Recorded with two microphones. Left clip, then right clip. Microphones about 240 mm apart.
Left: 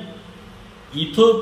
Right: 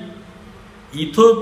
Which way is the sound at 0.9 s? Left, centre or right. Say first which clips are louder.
Right 3 dB; centre.